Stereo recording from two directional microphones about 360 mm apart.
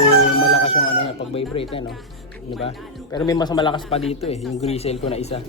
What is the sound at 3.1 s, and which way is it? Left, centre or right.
Speech, centre.